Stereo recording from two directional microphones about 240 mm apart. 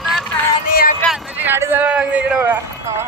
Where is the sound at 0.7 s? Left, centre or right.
Left.